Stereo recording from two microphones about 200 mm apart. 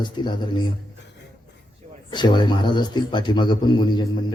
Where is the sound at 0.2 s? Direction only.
25° left (ahead or behind).